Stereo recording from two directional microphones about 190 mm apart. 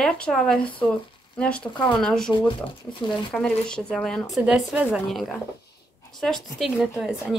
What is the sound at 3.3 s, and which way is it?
Speech, 5° left (ahead or behind).